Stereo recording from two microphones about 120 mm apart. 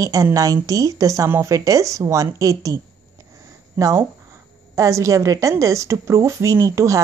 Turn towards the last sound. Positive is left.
turn(degrees=-25)  # may be behind; listen again after turning